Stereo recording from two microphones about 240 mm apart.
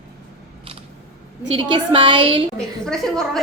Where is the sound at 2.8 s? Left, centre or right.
Centre.